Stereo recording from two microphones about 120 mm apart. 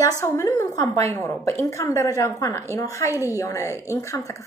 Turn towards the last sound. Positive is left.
turn(degrees=25)  # may be behind; listen again after turning